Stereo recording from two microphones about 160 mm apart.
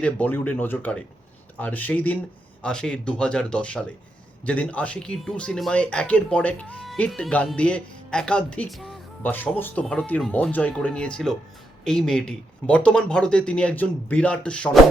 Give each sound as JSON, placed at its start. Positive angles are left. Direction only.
{"t": 0.0, "sound": "speech", "side_deg": 10}
{"t": 9.3, "sound": "speech", "side_deg": 10}